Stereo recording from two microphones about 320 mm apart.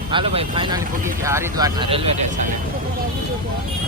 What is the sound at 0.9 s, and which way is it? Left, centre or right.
Speech, right.